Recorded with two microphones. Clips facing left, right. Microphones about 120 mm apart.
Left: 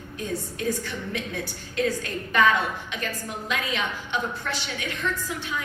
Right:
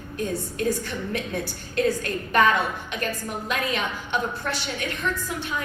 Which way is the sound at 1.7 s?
50° right (ahead or behind).